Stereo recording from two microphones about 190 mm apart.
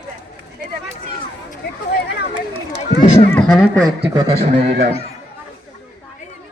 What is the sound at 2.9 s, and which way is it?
Speech, 35° left (ahead or behind).